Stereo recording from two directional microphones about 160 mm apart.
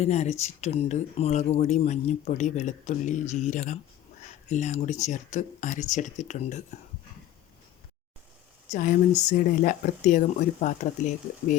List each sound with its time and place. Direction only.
0.0 s speech: 45° left (ahead or behind)
8.7 s speech: 50° left (ahead or behind)